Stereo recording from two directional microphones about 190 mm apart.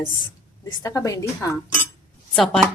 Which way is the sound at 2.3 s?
Centre (ahead or behind).